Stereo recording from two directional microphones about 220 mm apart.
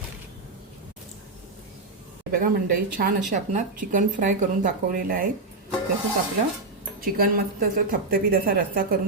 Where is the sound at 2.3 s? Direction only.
40° right (ahead or behind).